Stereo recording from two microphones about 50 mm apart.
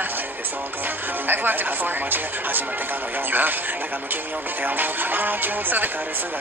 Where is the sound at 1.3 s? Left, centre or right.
Right.